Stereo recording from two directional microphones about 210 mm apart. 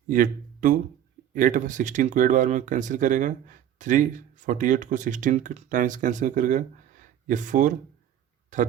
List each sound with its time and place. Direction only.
0.1 s speech: 40° right (ahead or behind)